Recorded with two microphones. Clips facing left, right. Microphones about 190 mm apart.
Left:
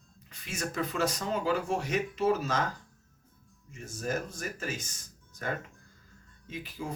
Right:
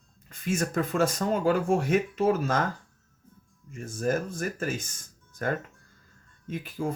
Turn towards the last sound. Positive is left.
turn(degrees=-50)  # may be behind; listen again after turning